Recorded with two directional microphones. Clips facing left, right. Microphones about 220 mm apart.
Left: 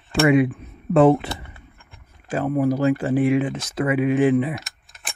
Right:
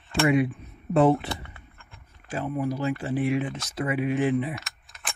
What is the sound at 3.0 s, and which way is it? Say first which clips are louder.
Speech: left 7 dB; 90° left.